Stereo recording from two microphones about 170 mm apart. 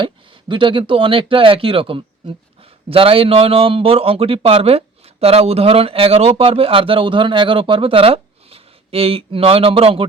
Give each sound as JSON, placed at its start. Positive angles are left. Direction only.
{"t": 0.0, "sound": "speech", "side_deg": -30}